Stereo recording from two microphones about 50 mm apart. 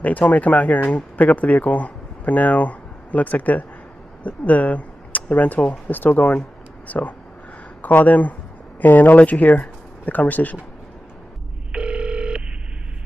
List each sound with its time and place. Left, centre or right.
0.0 s speech: left
11.7 s telephone: centre